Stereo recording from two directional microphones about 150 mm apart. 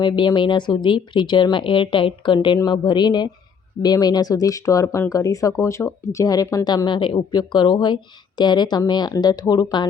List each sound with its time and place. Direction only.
0.0 s speech: 30° left (ahead or behind)